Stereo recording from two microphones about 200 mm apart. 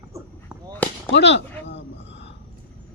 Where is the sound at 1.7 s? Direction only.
60° left (ahead or behind).